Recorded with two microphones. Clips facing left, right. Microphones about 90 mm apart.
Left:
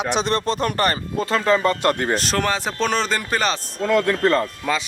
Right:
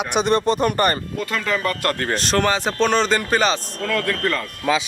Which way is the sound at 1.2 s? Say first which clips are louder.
Left 6 dB; 30° left (ahead or behind).